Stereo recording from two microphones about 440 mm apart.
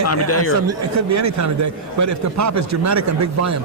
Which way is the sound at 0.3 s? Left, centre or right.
Left.